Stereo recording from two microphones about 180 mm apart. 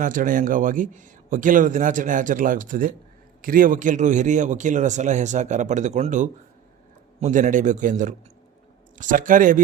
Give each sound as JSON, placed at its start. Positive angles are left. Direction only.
{"t": 0.0, "sound": "a man's voice", "side_deg": -50}